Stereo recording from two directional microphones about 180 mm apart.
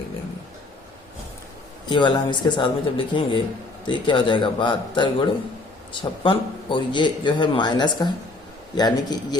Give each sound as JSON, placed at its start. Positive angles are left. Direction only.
{"t": 1.9, "sound": "a man's voice", "side_deg": 25}